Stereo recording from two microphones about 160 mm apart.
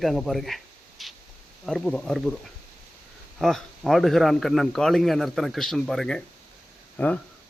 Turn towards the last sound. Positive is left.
turn(degrees=10)  # may be behind; listen again after turning